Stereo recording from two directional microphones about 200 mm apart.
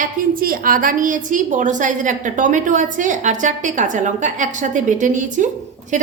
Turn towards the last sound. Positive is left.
turn(degrees=-40)  # may be behind; listen again after turning